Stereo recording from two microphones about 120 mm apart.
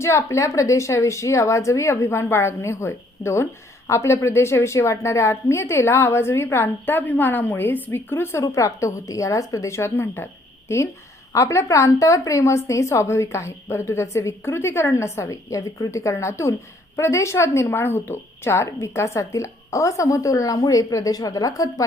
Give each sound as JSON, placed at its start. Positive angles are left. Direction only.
{"t": 0.0, "sound": "a woman's voice", "side_deg": 25}
{"t": 11.3, "sound": "a woman's voice", "side_deg": 25}